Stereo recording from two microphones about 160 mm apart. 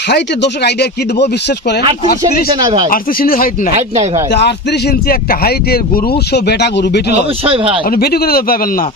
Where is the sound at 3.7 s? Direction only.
40° right (ahead or behind).